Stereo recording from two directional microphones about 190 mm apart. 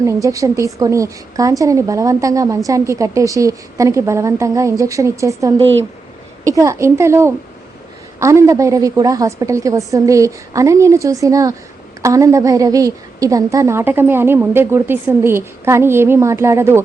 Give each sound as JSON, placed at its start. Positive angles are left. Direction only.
{"t": 0.0, "sound": "a woman's voice", "side_deg": -15}